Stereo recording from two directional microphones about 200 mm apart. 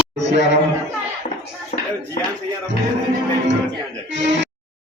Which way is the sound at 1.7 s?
35° left (ahead or behind).